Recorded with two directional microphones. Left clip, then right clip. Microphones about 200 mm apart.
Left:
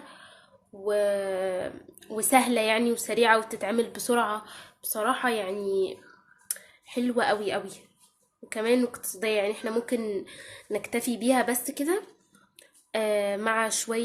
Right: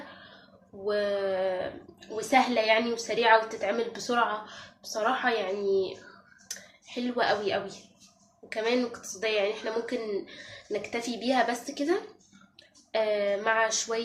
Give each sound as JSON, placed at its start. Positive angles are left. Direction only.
{"t": 0.9, "sound": "a woman's voice", "side_deg": 55}
{"t": 6.5, "sound": "a sound", "side_deg": 55}
{"t": 8.4, "sound": "a woman's voice", "side_deg": 55}